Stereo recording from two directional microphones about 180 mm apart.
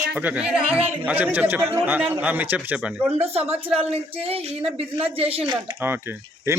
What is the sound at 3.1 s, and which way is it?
A woman's voice, 35° right (ahead or behind).